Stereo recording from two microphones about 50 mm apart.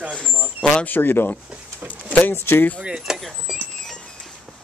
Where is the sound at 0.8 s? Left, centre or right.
Left.